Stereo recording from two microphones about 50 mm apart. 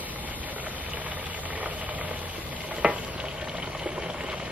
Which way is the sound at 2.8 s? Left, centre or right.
Right.